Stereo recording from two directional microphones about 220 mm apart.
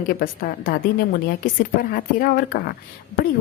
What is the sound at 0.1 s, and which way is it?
A woman's voice, 40° left (ahead or behind).